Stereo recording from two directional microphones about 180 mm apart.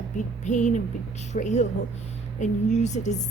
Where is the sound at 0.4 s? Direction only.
40° left (ahead or behind).